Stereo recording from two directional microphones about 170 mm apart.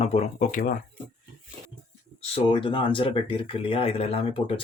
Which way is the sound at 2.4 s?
30° left (ahead or behind).